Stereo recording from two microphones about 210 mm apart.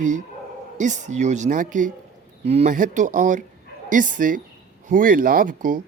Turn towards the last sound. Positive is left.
turn(degrees=-40)  # may be behind; listen again after turning